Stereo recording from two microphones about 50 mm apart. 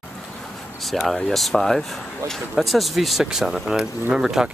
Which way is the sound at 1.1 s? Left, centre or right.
Centre.